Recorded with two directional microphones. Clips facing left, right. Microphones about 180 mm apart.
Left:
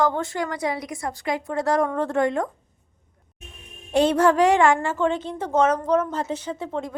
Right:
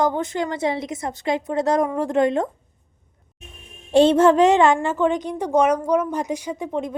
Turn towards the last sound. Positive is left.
turn(degrees=-15)  # may be behind; listen again after turning